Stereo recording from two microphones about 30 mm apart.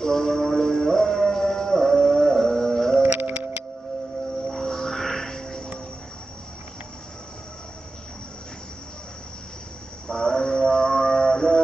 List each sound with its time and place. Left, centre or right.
0.0 s music: centre
3.1 s music: right
4.5 s music: centre
10.0 s music: left